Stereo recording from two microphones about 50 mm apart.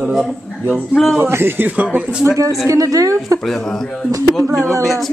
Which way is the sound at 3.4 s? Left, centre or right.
Centre.